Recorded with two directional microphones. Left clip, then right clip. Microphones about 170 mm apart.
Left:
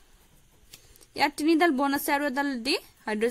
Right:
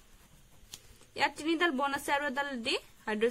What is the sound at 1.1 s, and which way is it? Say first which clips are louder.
A woman's voice: left 7 dB; 50° left (ahead or behind).